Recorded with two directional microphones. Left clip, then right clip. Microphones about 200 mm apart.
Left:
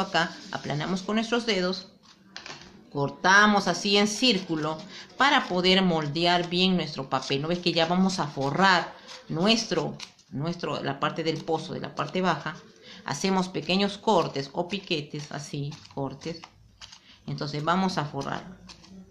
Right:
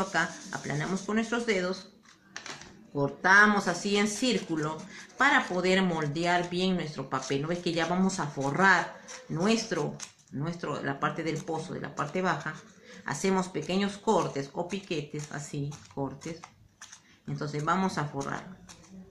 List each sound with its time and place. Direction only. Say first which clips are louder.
0.0 s speech: left 3 dB; 45° left (ahead or behind)
2.9 s speech: left 2 dB; 45° left (ahead or behind)
17.4 s speech: left 2 dB; 45° left (ahead or behind)